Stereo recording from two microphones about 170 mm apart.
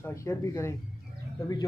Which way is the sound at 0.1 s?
15° left (ahead or behind).